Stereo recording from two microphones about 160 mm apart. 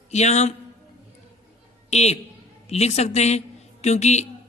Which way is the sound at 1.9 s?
45° left (ahead or behind).